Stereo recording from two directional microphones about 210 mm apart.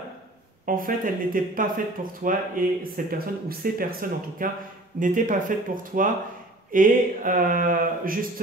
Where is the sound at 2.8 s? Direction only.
45° right (ahead or behind).